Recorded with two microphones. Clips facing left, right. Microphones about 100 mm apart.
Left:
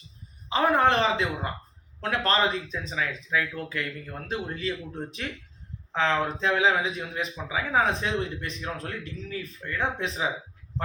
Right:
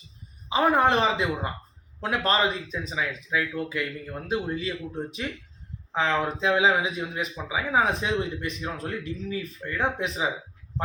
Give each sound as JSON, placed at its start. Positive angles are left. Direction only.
{"t": 0.5, "sound": "speech", "side_deg": -10}